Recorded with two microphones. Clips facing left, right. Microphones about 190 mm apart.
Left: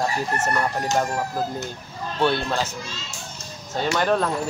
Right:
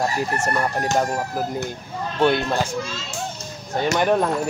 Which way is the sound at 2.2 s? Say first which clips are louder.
Right 3 dB; 15° right (ahead or behind).